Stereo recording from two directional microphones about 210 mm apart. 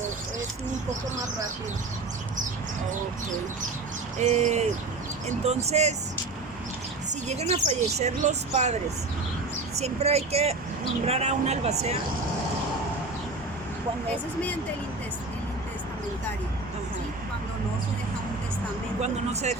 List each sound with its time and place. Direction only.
4.2 s speech: 35° right (ahead or behind)
7.1 s speech: 30° right (ahead or behind)
9.7 s speech: 30° right (ahead or behind)
19.0 s speech: 30° right (ahead or behind)